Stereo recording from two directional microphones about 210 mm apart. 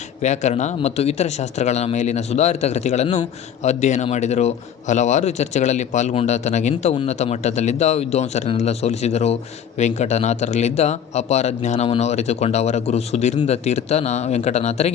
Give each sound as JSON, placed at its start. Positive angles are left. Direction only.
{"t": 0.2, "sound": "speech", "side_deg": 35}